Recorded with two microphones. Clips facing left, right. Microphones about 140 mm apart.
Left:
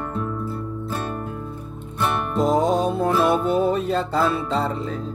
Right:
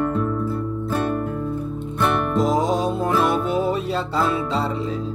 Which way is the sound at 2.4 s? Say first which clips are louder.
Left 4 dB; 50° left (ahead or behind).